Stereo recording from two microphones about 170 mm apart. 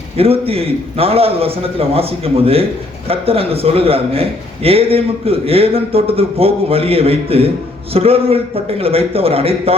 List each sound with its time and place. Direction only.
0.2 s a man's voice: 35° right (ahead or behind)